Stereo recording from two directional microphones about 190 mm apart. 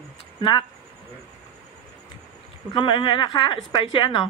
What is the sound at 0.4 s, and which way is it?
Speech, 25° left (ahead or behind).